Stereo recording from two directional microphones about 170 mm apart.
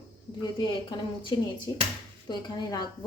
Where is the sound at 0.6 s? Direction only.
25° left (ahead or behind).